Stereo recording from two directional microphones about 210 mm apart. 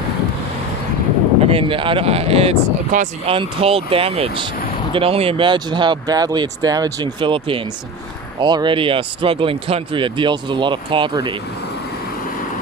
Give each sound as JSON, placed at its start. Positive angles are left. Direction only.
{"t": 1.4, "sound": "speech", "side_deg": -25}